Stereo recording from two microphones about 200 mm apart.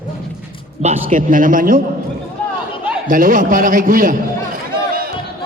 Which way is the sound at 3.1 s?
40° right (ahead or behind).